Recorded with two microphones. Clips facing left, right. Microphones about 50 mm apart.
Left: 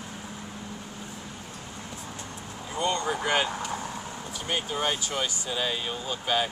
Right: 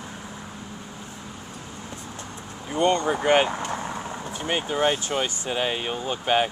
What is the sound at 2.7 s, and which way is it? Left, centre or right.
Speech, right.